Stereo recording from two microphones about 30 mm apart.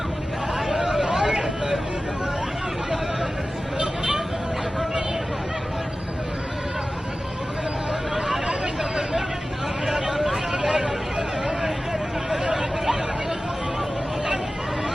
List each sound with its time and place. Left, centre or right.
0.7 s hubbub: centre
1.2 s vehicle: centre
8.8 s hubbub: centre
10.2 s vehicle: centre
10.5 s vehicle: centre
12.5 s hubbub: centre